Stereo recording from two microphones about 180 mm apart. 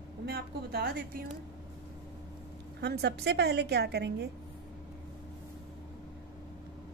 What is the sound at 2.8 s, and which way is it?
A woman's voice, 65° right (ahead or behind).